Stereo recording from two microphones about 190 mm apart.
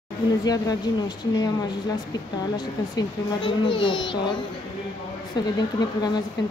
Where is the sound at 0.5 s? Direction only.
20° left (ahead or behind).